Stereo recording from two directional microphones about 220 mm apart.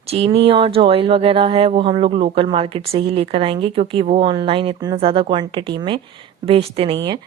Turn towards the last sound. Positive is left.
turn(degrees=-25)  # may be behind; listen again after turning